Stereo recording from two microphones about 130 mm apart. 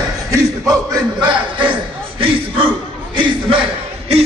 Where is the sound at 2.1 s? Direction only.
40° right (ahead or behind).